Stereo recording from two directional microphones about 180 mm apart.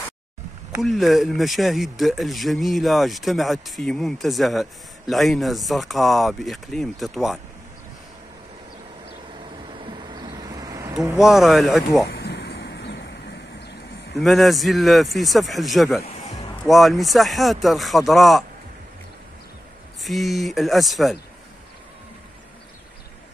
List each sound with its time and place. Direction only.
0.8 s speech: centre (ahead or behind)
9.8 s a sound: 25° right (ahead or behind)
11.1 s speech: centre (ahead or behind)
12.1 s a sound: 60° left (ahead or behind)
14.2 s speech: centre (ahead or behind)
20.0 s speech: centre (ahead or behind)